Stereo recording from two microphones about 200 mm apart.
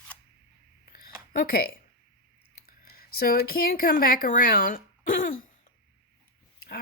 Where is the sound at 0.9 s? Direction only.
50° left (ahead or behind).